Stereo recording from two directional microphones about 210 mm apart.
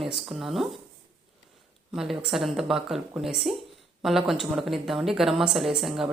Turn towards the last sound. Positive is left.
turn(degrees=0)  # may be behind; listen again after turning